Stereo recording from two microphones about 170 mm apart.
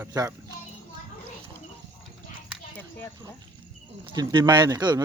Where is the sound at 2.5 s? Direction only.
10° left (ahead or behind).